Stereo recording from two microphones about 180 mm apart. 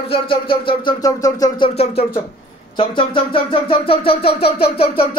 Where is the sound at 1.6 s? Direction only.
35° left (ahead or behind).